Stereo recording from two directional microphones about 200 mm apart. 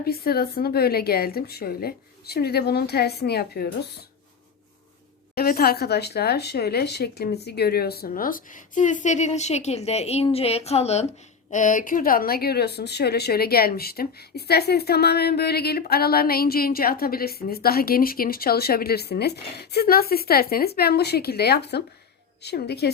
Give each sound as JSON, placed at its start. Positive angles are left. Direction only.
{"t": 0.0, "sound": "speech", "side_deg": 50}
{"t": 5.3, "sound": "a woman's voice", "side_deg": 50}